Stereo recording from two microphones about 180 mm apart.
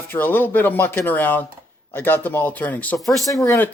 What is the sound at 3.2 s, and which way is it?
Speech, 20° left (ahead or behind).